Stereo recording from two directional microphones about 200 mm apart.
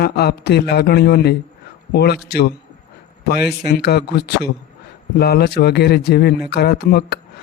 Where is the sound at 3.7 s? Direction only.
55° left (ahead or behind).